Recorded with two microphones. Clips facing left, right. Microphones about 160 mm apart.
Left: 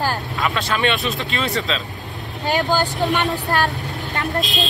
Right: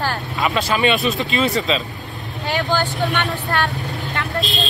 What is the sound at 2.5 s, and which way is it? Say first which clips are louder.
Speech: left 1 dB; 40° left (ahead or behind).